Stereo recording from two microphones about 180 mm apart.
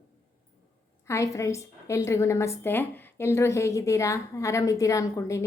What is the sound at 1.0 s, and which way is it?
A woman's voice, 15° left (ahead or behind).